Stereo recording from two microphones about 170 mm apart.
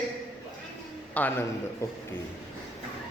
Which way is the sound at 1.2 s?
10° left (ahead or behind).